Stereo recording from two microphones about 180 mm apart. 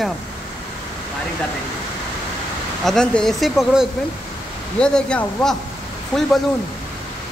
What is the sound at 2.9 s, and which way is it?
Speech, 5° left (ahead or behind).